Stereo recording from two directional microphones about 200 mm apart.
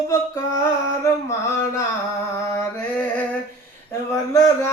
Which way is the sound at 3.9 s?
15° left (ahead or behind).